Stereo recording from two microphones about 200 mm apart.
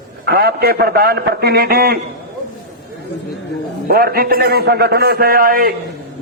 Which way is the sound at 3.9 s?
50° right (ahead or behind).